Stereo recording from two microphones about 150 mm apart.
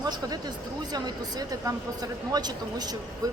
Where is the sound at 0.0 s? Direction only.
25° right (ahead or behind).